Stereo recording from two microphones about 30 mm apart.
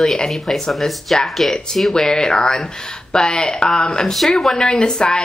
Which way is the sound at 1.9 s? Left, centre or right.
Left.